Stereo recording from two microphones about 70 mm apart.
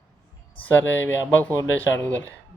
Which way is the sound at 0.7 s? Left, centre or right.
Left.